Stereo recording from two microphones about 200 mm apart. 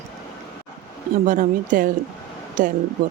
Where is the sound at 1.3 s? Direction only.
40° right (ahead or behind).